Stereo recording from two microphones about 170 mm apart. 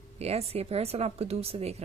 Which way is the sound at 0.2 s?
40° right (ahead or behind).